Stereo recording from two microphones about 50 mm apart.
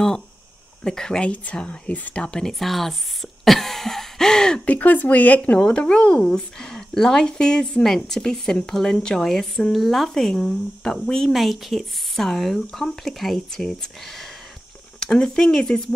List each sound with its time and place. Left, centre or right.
0.8 s a woman's voice: centre
1.3 s a woman's voice: left
2.3 s speech: centre
3.4 s throat clearing: centre
4.6 s speech: left
5.8 s a woman's voice: centre
11.3 s speech: centre